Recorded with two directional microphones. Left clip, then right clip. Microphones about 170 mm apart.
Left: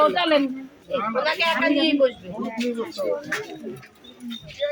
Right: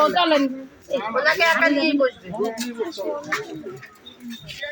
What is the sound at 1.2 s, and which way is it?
Speech, 30° right (ahead or behind).